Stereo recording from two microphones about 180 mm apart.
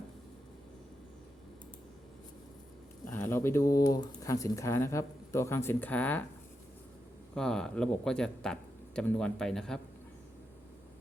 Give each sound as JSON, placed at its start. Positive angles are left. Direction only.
{"t": 3.1, "sound": "speech", "side_deg": 10}
{"t": 7.3, "sound": "speech", "side_deg": 5}